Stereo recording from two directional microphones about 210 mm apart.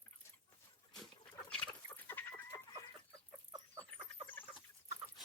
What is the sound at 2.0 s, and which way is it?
Chicken, 10° left (ahead or behind).